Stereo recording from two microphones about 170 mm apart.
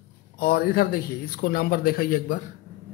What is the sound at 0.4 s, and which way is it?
A man's voice, 65° left (ahead or behind).